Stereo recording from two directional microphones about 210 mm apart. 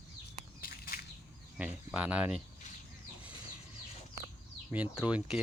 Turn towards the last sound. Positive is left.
turn(degrees=-5)  # may be behind; listen again after turning